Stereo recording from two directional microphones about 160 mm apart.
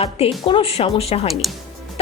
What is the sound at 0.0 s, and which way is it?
A woman's voice, 35° left (ahead or behind).